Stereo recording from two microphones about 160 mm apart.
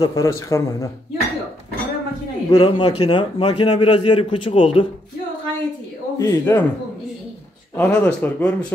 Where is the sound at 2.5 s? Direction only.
30° left (ahead or behind).